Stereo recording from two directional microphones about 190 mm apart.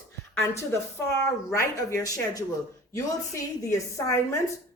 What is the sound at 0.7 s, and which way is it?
A woman's voice, 15° left (ahead or behind).